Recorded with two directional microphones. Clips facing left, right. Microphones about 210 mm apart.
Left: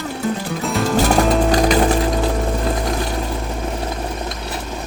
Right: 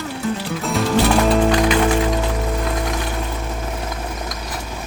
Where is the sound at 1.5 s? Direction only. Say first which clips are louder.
Left 1 dB; 40° left (ahead or behind).